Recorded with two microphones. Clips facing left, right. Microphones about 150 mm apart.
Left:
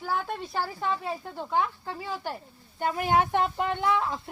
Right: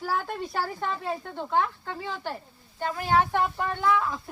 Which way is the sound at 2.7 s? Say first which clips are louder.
Even; 15° left (ahead or behind).